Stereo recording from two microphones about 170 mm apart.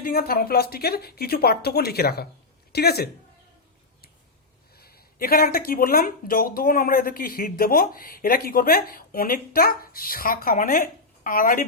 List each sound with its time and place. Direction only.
0.0 s speech: 60° left (ahead or behind)
4.8 s speech: 65° left (ahead or behind)